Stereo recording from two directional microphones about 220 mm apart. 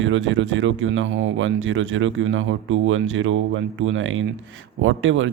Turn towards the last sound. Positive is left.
turn(degrees=-60)  # may be behind; listen again after turning